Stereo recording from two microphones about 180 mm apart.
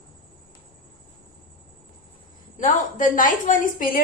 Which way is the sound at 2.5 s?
45° left (ahead or behind).